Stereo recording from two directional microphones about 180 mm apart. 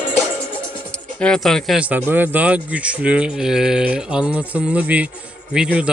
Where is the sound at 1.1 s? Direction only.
5° left (ahead or behind).